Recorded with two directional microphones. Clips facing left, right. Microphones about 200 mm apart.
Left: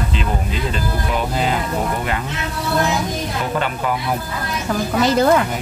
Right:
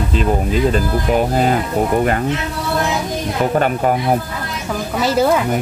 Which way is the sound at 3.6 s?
45° right (ahead or behind).